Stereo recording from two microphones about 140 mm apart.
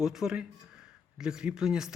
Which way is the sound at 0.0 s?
5° right (ahead or behind).